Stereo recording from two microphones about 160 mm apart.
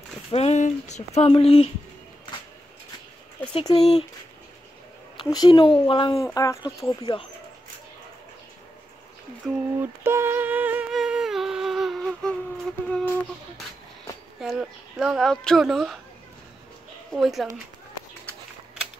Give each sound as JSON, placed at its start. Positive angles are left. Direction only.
{"t": 0.3, "sound": "a sound", "side_deg": 40}
{"t": 1.2, "sound": "speech", "side_deg": 35}
{"t": 5.1, "sound": "speech", "side_deg": 30}
{"t": 6.1, "sound": "speech", "side_deg": 20}
{"t": 9.5, "sound": "humming", "side_deg": -15}
{"t": 12.8, "sound": "a sound", "side_deg": 10}
{"t": 14.4, "sound": "speech", "side_deg": 0}
{"t": 17.1, "sound": "speech", "side_deg": 0}